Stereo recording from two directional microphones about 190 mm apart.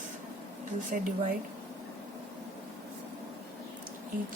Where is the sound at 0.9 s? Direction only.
50° right (ahead or behind).